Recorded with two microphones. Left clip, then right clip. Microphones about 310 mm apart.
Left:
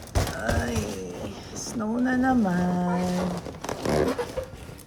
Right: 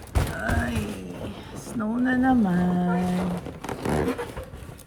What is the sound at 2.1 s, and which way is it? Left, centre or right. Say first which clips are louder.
Speech: right 2 dB; right.